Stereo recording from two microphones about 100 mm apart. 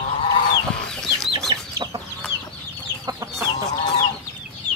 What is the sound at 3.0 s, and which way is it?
Chicken, 30° right (ahead or behind).